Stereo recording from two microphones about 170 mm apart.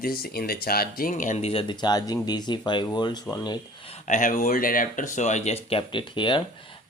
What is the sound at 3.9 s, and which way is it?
Speech, 45° left (ahead or behind).